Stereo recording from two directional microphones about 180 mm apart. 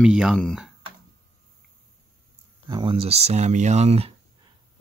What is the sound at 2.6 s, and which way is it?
Speech, 25° right (ahead or behind).